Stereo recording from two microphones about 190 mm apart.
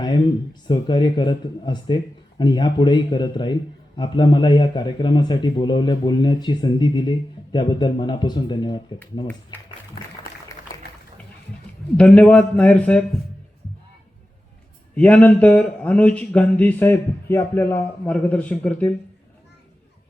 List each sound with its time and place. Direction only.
0.7 s a man's voice: 25° left (ahead or behind)
11.9 s speech: 5° left (ahead or behind)
14.9 s speech: 5° left (ahead or behind)